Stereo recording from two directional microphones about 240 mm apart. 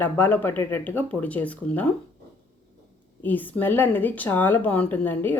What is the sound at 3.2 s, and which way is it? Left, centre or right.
Speech, centre.